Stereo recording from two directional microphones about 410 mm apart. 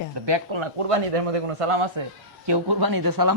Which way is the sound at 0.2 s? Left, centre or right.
Right.